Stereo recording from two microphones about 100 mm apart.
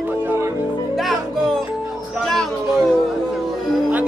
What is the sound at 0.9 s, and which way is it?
Music, centre (ahead or behind).